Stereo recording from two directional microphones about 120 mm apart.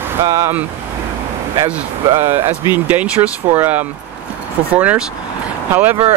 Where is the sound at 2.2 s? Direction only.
20° right (ahead or behind).